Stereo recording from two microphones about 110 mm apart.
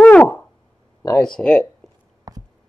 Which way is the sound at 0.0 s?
15° left (ahead or behind).